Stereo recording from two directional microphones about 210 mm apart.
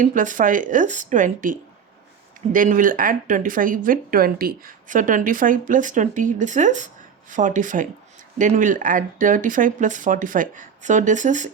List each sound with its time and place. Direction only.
0.0 s speech: 40° right (ahead or behind)